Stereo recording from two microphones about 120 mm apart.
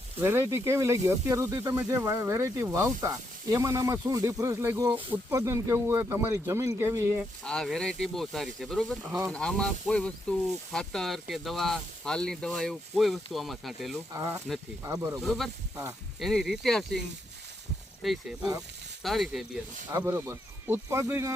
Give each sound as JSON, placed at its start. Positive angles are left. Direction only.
{"t": 0.2, "sound": "speech", "side_deg": -20}
{"t": 7.4, "sound": "speech", "side_deg": 5}
{"t": 14.1, "sound": "speech", "side_deg": -25}
{"t": 15.2, "sound": "speech", "side_deg": 0}
{"t": 18.0, "sound": "speech", "side_deg": 0}
{"t": 20.1, "sound": "speech", "side_deg": -20}